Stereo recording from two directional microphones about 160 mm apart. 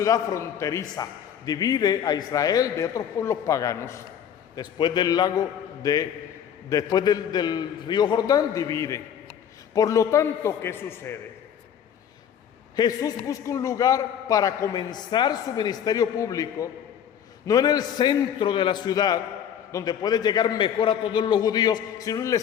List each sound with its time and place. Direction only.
0.0 s a man's voice: 20° left (ahead or behind)
4.5 s a man's voice: 30° left (ahead or behind)
12.7 s a man's voice: 25° left (ahead or behind)